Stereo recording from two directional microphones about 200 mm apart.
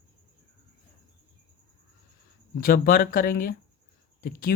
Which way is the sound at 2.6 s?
45° left (ahead or behind).